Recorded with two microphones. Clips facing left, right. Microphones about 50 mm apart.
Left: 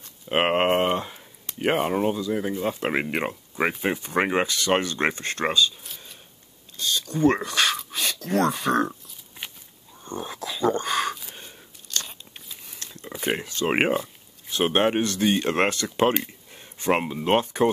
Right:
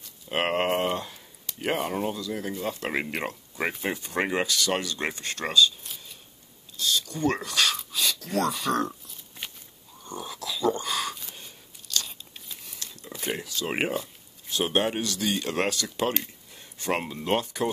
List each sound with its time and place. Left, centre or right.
0.3 s speech: left
6.8 s speech: left
7.9 s speech: left
10.0 s speech: left
11.9 s crunch: left
12.7 s a sound: left
13.2 s speech: left
16.1 s a sound: centre
17.2 s speech: left